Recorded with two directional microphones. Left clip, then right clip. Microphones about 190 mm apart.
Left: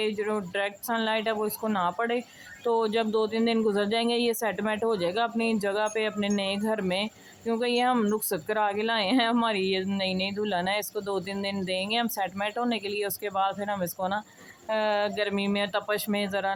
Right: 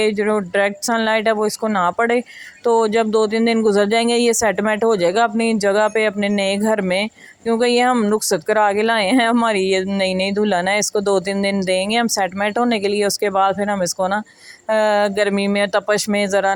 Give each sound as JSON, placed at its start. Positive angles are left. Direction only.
{"t": 0.0, "sound": "speech", "side_deg": -30}